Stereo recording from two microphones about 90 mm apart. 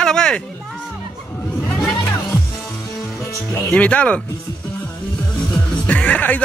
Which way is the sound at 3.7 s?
15° left (ahead or behind).